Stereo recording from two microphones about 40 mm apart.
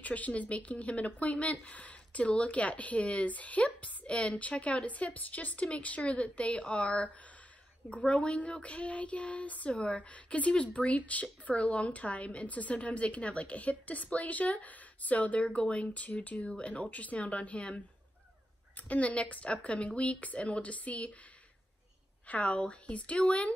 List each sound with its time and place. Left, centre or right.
0.0 s speech: left
22.3 s speech: left